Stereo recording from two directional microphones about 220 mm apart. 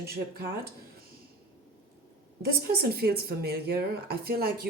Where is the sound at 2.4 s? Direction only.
45° right (ahead or behind).